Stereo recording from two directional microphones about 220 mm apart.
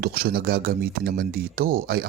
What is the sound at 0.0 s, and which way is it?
Speech, 45° right (ahead or behind).